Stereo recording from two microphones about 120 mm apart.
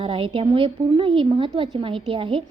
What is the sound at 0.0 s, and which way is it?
A woman's voice, 45° right (ahead or behind).